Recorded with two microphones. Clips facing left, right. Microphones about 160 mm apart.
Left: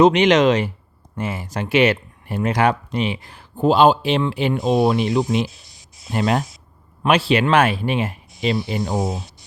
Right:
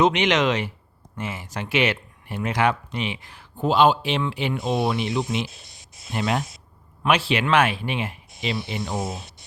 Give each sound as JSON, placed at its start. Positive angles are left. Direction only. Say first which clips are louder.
{"t": 0.0, "sound": "speech", "louder": "left 6 dB", "side_deg": 40}